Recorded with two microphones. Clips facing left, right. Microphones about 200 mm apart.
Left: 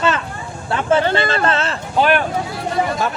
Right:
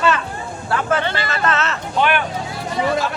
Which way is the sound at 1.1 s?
30° left (ahead or behind).